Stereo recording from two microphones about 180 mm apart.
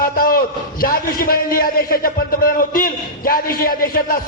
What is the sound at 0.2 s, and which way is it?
A man's voice, 55° left (ahead or behind).